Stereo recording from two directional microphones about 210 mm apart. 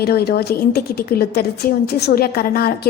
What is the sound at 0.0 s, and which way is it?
A woman's voice, 50° left (ahead or behind).